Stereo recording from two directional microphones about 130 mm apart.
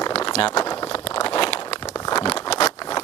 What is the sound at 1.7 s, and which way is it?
Crumpling, 30° left (ahead or behind).